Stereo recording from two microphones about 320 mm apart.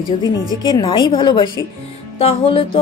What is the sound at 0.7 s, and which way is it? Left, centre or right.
A woman's voice, centre.